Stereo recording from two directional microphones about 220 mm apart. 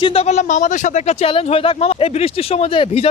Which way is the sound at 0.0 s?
25° left (ahead or behind).